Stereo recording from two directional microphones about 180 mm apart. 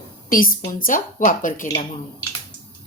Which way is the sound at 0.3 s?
50° left (ahead or behind).